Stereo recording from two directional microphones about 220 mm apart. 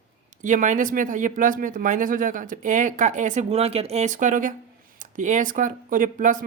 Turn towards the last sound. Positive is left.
turn(degrees=-35)  # may be behind; listen again after turning